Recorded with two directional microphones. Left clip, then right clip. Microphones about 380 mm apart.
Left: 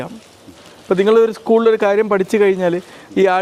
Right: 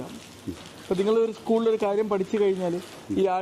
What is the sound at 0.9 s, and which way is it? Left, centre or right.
Speech, centre.